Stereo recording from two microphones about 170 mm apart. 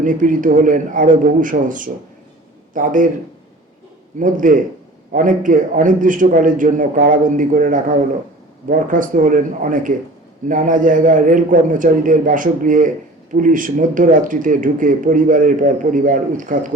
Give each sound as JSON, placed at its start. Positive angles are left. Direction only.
{"t": 0.0, "sound": "speech", "side_deg": -50}
{"t": 4.2, "sound": "speech", "side_deg": -50}